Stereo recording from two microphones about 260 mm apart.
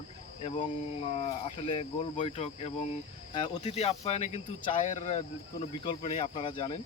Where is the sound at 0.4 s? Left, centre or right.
Left.